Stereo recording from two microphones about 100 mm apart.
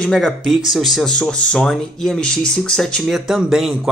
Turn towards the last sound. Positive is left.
turn(degrees=-5)  # may be behind; listen again after turning